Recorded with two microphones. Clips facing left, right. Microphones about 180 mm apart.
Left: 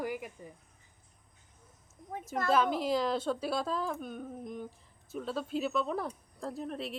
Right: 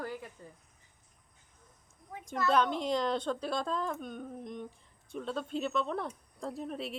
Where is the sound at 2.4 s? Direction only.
5° left (ahead or behind).